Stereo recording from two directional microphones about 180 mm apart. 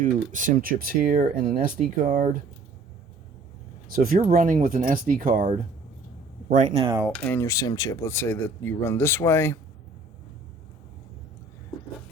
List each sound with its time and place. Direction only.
0.0 s speech: 45° right (ahead or behind)
3.9 s speech: 50° right (ahead or behind)
6.5 s speech: 40° right (ahead or behind)
7.3 s speech: 15° left (ahead or behind)